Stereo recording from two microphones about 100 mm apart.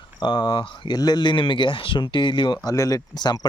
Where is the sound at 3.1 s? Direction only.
45° left (ahead or behind).